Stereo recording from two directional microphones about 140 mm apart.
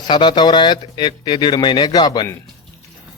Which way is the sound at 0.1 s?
30° left (ahead or behind).